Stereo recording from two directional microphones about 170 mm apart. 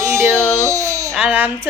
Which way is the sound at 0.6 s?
20° right (ahead or behind).